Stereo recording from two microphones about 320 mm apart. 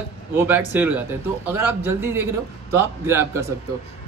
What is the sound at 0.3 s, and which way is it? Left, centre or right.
Speech, centre.